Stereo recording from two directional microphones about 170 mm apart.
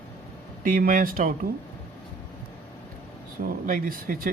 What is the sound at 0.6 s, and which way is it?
Speech, 55° right (ahead or behind).